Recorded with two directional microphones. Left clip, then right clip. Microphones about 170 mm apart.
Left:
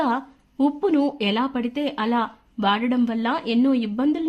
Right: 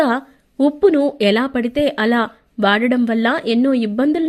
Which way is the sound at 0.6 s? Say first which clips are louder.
Right 7 dB; 20° right (ahead or behind).